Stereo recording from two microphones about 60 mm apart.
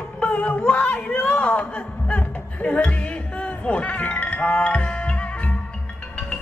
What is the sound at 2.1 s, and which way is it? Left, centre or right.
Music, left.